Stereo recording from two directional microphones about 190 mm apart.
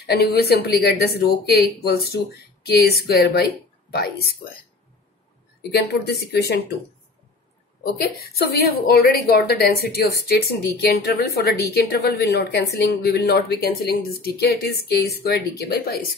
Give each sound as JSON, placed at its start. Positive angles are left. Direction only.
{"t": 0.0, "sound": "a woman's voice", "side_deg": 60}
{"t": 5.6, "sound": "a woman's voice", "side_deg": 60}
{"t": 7.8, "sound": "a woman's voice", "side_deg": 50}